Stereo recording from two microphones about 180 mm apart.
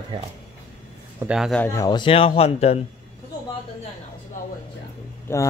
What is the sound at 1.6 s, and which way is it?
A man's voice, 15° left (ahead or behind).